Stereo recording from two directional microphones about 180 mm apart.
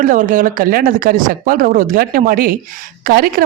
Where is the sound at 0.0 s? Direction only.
45° right (ahead or behind).